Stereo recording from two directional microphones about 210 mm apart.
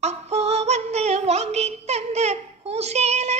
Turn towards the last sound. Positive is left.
turn(degrees=-30)  # may be behind; listen again after turning